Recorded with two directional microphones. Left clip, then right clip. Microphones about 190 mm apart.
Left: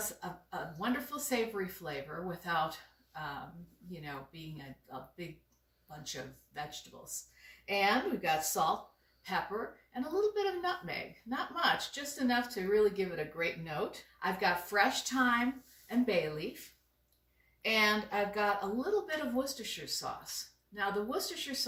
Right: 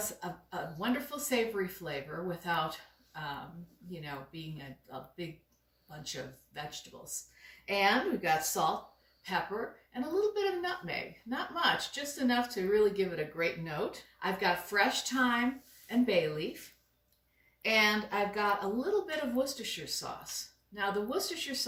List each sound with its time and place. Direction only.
0.2 s speech: centre (ahead or behind)
10.1 s speech: centre (ahead or behind)